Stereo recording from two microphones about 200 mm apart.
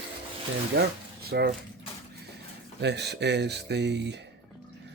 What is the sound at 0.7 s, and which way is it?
Speech, 50° right (ahead or behind).